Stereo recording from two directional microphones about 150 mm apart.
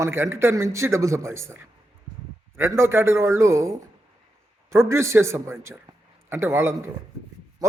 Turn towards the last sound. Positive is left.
turn(degrees=-15)  # may be behind; listen again after turning